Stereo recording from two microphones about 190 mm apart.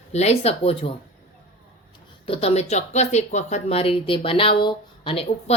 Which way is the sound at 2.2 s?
30° left (ahead or behind).